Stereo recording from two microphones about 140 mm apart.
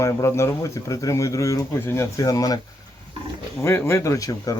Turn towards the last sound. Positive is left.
turn(degrees=25)  # may be behind; listen again after turning